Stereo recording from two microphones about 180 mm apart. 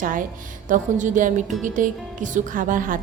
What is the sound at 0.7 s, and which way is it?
A woman's voice, 45° right (ahead or behind).